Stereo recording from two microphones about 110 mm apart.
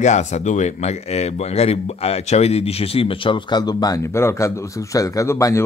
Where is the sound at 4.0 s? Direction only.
25° left (ahead or behind).